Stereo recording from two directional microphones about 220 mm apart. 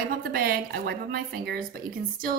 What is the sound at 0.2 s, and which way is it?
A woman's voice, 45° right (ahead or behind).